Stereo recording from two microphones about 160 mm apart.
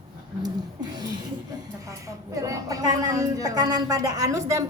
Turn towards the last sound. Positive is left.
turn(degrees=-20)  # may be behind; listen again after turning